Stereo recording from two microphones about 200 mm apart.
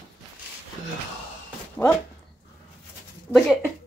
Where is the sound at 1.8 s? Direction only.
15° left (ahead or behind).